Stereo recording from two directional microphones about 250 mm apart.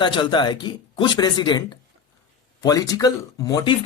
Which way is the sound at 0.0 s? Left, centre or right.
Centre.